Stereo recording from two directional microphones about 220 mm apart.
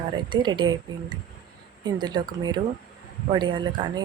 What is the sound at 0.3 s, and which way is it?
Speech, 20° right (ahead or behind).